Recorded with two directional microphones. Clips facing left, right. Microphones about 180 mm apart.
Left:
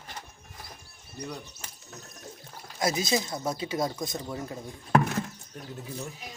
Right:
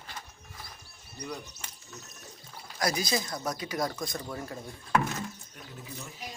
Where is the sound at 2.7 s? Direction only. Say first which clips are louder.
Left 3 dB; 25° left (ahead or behind).